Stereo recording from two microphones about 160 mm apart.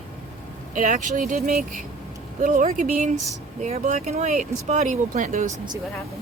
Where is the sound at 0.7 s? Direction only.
55° right (ahead or behind).